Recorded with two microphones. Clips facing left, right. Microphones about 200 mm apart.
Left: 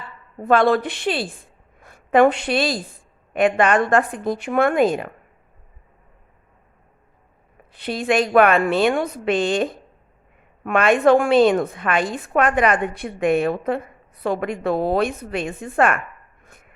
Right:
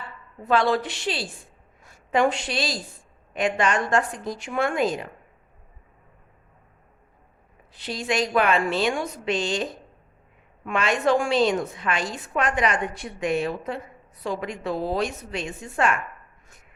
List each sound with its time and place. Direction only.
0.4 s a woman's voice: 55° left (ahead or behind)
7.7 s a woman's voice: 55° left (ahead or behind)
16.5 s a sound: 55° left (ahead or behind)